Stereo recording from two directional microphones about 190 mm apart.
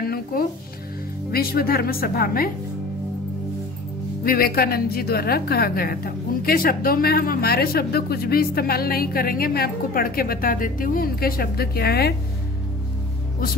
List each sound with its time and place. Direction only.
0.1 s music: 50° left (ahead or behind)
1.3 s a woman's voice: 55° left (ahead or behind)
4.2 s a woman's voice: 50° left (ahead or behind)